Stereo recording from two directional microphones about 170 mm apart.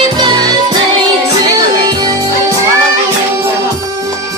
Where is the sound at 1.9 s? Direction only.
25° right (ahead or behind).